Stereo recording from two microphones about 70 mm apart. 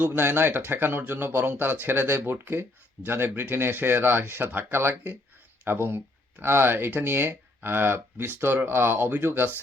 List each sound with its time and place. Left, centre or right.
0.0 s speech: right